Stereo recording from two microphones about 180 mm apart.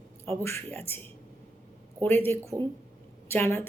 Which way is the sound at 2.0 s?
10° left (ahead or behind).